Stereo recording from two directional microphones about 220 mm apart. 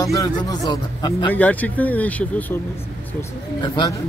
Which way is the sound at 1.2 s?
5° left (ahead or behind).